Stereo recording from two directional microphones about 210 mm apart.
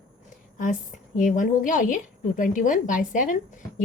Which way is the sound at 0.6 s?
40° left (ahead or behind).